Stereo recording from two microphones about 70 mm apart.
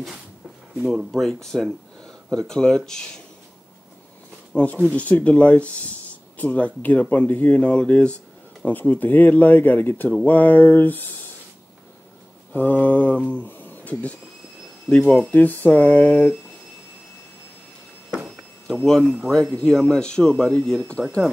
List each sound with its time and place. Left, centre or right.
0.8 s speech: centre
4.5 s speech: centre
12.5 s speech: left
18.2 s a sound: centre
19.2 s speech: centre
19.5 s speech: centre